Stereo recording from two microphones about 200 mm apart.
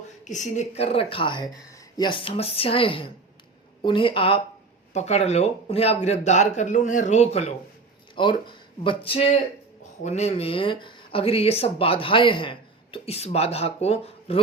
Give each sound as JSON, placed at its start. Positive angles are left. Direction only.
{"t": 0.3, "sound": "speech", "side_deg": 35}